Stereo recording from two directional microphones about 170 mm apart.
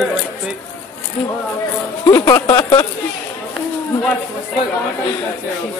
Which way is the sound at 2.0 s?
15° left (ahead or behind).